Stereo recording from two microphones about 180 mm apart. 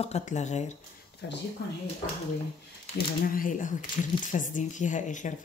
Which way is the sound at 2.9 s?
50° left (ahead or behind).